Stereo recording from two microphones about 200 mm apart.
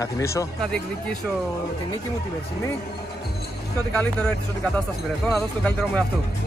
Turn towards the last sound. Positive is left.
turn(degrees=5)  # may be behind; listen again after turning